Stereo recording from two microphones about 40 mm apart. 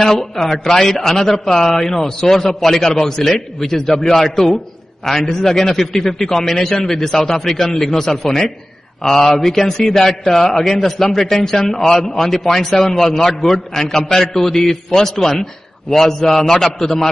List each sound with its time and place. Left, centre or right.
0.0 s a man's voice: centre